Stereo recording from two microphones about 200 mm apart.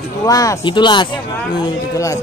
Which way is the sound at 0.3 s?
15° left (ahead or behind).